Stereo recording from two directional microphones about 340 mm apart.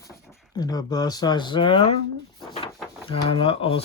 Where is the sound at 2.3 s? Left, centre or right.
Centre.